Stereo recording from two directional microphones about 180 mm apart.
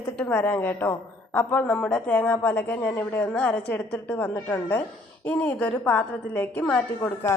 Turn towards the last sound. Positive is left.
turn(degrees=15)  # may be behind; listen again after turning